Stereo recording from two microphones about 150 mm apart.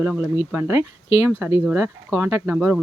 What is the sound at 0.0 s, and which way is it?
Speech, 15° right (ahead or behind).